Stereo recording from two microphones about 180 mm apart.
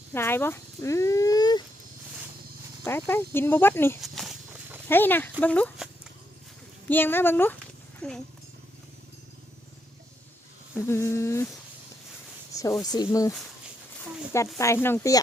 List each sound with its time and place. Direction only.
0.1 s speech: 15° left (ahead or behind)
2.8 s speech: 15° left (ahead or behind)
4.0 s a sound: centre (ahead or behind)
4.9 s speech: 10° left (ahead or behind)
6.8 s speech: 10° left (ahead or behind)
10.8 s speech: 15° left (ahead or behind)
12.5 s speech: 20° left (ahead or behind)
14.6 s speech: 15° left (ahead or behind)